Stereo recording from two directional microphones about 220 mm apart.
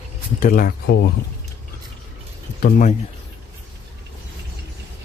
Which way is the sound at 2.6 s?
40° left (ahead or behind).